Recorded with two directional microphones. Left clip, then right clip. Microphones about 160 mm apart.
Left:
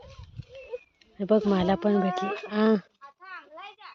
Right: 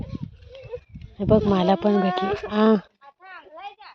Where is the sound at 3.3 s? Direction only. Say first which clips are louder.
Right 4 dB; 20° right (ahead or behind).